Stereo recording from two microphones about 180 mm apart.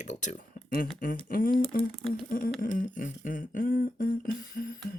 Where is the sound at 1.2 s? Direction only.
50° left (ahead or behind).